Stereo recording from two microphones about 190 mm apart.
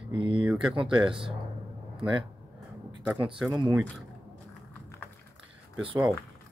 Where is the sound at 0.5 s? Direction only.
5° right (ahead or behind).